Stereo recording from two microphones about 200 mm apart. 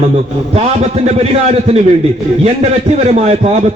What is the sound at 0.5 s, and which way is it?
Speech, 30° right (ahead or behind).